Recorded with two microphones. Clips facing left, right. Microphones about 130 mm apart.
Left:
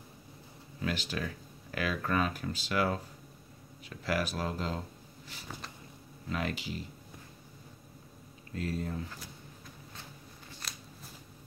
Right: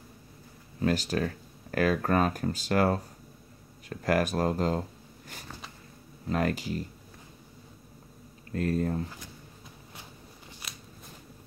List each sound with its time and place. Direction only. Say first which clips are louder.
0.7 s speech: right 8 dB; 40° right (ahead or behind)
6.2 s speech: right 7 dB; 45° right (ahead or behind)
8.5 s speech: right 7 dB; 50° right (ahead or behind)
10.6 s shuffling cards: even; centre (ahead or behind)